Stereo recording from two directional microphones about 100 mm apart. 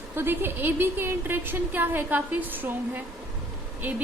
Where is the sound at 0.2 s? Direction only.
20° right (ahead or behind).